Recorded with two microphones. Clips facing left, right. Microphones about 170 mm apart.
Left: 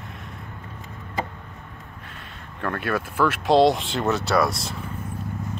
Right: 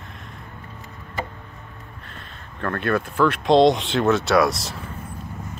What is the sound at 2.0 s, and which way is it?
Speech, 10° left (ahead or behind).